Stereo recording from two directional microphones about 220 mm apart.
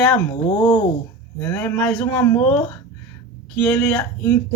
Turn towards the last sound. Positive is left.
turn(degrees=10)  # may be behind; listen again after turning